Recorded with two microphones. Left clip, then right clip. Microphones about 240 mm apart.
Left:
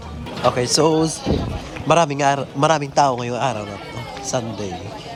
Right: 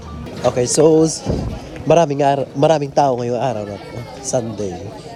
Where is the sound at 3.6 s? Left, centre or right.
Centre.